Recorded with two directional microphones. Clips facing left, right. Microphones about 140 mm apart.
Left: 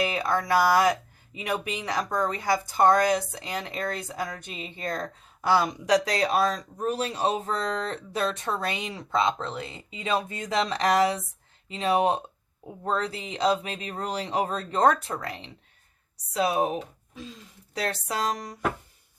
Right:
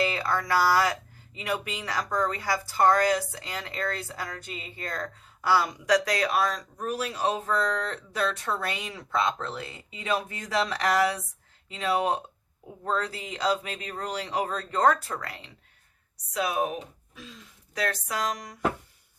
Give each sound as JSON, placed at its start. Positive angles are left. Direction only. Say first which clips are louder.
{"t": 0.0, "sound": "speech", "louder": "left 1 dB", "side_deg": 15}